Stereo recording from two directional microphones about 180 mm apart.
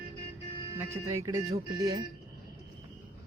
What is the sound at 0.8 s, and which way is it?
Speech, 15° right (ahead or behind).